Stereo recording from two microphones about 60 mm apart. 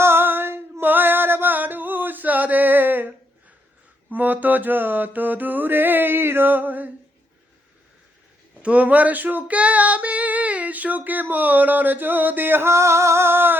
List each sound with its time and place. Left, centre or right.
0.0 s a sound: right
4.1 s mantra: right
8.5 s female singing: right